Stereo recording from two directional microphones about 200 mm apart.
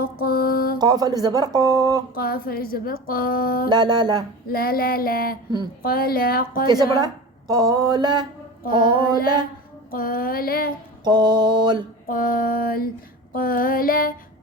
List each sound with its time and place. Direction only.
0.0 s mantra: 50° left (ahead or behind)
0.8 s speech: 20° right (ahead or behind)
2.1 s a woman's voice: 50° left (ahead or behind)
3.7 s speech: 20° right (ahead or behind)
4.4 s a woman's voice: 45° left (ahead or behind)
6.7 s speech: 20° right (ahead or behind)
9.9 s a woman's voice: 45° left (ahead or behind)
11.0 s speech: 20° right (ahead or behind)
12.0 s a woman's voice: 45° left (ahead or behind)